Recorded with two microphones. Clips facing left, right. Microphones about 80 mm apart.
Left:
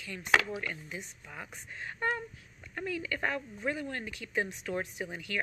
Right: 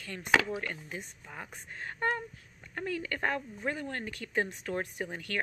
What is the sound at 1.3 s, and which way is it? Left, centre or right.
Speech, right.